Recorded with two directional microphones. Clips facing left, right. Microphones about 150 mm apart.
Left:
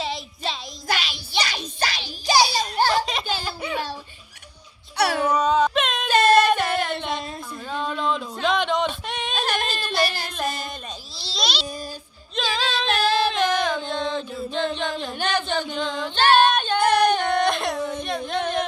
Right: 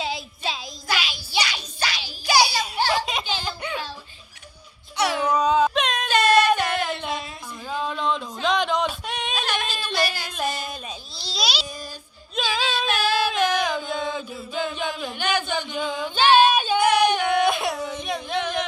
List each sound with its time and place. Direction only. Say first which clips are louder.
0.0 s music: even; centre (ahead or behind)
1.0 s child singing: right 1 dB; centre (ahead or behind)
1.4 s child singing: left 2 dB; 45° left (ahead or behind)
2.9 s baby laughter: left 1 dB; centre (ahead or behind)
4.9 s babbling: left 2 dB; 65° left (ahead or behind)
5.3 s a sound: right 3 dB; centre (ahead or behind)
9.8 s singing: left 1 dB; centre (ahead or behind)
11.1 s a sound: even; centre (ahead or behind)
12.4 s female singing: even; 5° right (ahead or behind)
15.2 s a sound: even; 10° right (ahead or behind)
18.0 s music: left 1 dB; centre (ahead or behind)